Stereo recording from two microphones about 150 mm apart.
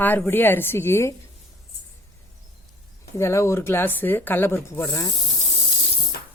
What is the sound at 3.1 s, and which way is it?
Speech, 20° left (ahead or behind).